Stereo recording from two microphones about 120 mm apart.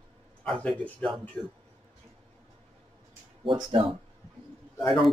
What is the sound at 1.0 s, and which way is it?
Speech, centre (ahead or behind).